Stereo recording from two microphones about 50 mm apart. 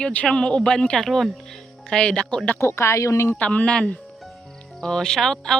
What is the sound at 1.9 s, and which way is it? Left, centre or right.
Speech, centre.